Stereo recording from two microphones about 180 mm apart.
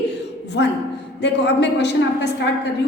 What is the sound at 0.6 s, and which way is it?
A woman's voice, 75° left (ahead or behind).